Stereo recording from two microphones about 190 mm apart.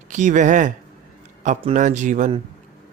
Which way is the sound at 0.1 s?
40° right (ahead or behind).